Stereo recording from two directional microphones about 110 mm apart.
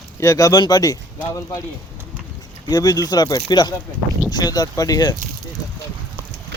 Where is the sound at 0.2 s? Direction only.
30° left (ahead or behind).